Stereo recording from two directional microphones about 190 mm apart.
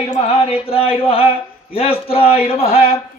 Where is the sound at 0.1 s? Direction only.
30° left (ahead or behind).